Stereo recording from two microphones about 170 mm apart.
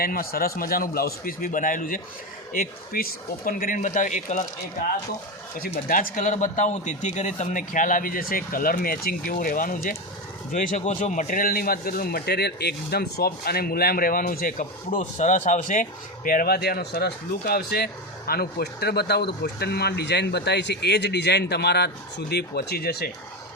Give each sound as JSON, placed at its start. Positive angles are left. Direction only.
{"t": 0.0, "sound": "a man's voice", "side_deg": 60}
{"t": 5.9, "sound": "a man's voice", "side_deg": 55}